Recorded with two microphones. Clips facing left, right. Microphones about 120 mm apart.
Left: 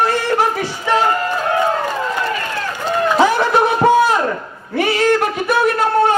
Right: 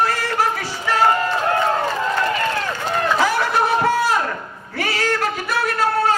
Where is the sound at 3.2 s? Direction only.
20° left (ahead or behind).